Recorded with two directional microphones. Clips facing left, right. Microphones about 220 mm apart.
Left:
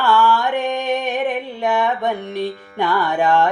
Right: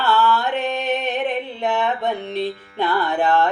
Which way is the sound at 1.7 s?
10° left (ahead or behind).